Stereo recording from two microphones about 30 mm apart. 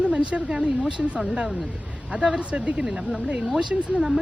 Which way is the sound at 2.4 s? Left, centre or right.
Right.